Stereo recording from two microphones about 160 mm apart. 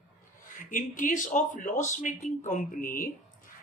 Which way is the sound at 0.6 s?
55° left (ahead or behind).